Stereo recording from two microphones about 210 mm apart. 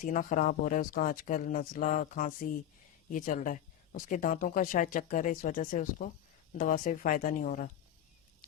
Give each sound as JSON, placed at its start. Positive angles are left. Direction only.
{"t": 0.0, "sound": "speech", "side_deg": 40}